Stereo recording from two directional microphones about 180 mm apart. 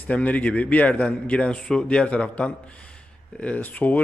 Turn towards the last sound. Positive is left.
turn(degrees=10)  # may be behind; listen again after turning